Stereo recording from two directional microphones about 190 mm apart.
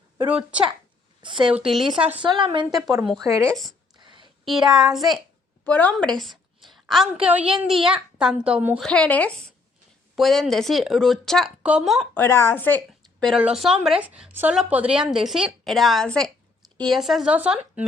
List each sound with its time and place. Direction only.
0.3 s speech: 5° right (ahead or behind)
1.2 s a woman's voice: 25° right (ahead or behind)
1.5 s speech: 5° right (ahead or behind)
2.1 s a woman's voice: 25° right (ahead or behind)
2.6 s speech: centre (ahead or behind)
3.2 s speech: 15° right (ahead or behind)
3.5 s speech: centre (ahead or behind)
3.9 s a sound: 25° right (ahead or behind)
4.4 s a woman's voice: centre (ahead or behind)
8.9 s speech: 5° left (ahead or behind)
12.1 s a woman's voice: 10° left (ahead or behind); by 17.8 s 5° right (ahead or behind)